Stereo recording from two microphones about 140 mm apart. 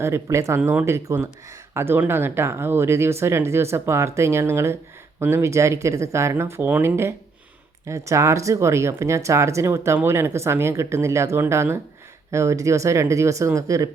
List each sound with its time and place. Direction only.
0.0 s speech: 20° right (ahead or behind)